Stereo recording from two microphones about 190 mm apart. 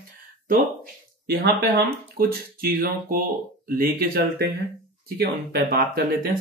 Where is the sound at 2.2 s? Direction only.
50° right (ahead or behind).